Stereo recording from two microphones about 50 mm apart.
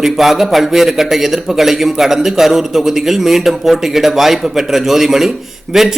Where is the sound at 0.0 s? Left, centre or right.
Centre.